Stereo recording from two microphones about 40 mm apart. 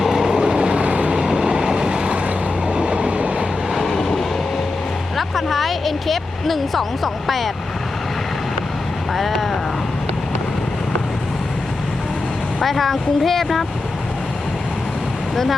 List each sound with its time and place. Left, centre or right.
0.0 s vehicle: centre
2.1 s vehicle: right
4.0 s train: centre
5.1 s speech: centre
9.1 s speech: centre
12.6 s speech: centre